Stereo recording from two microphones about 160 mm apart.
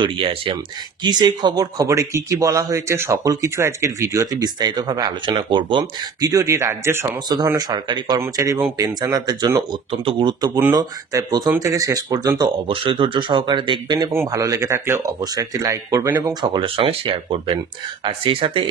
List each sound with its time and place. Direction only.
0.0 s speech: 30° right (ahead or behind)